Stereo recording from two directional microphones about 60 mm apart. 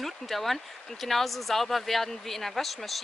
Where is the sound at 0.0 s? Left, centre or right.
Centre.